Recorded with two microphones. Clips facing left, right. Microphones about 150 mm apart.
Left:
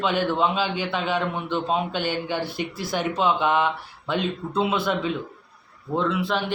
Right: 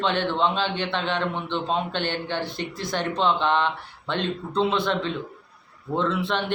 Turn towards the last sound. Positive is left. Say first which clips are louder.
# left 1 dB
turn(degrees=0)  # may be behind; listen again after turning